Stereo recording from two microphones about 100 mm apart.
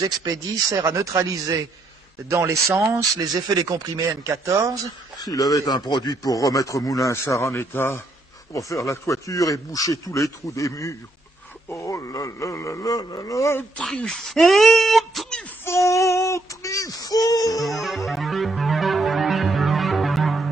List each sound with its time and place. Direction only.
0.0 s speech: 35° right (ahead or behind)
5.1 s a man's voice: 40° left (ahead or behind)
13.7 s speech: 10° left (ahead or behind)
15.9 s a sound: 30° left (ahead or behind)
17.6 s music: centre (ahead or behind)